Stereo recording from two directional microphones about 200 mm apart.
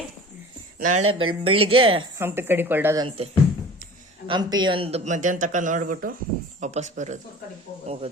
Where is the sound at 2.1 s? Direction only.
10° right (ahead or behind).